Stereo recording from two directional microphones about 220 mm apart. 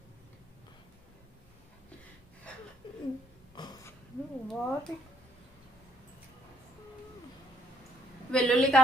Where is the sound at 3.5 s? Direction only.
20° left (ahead or behind).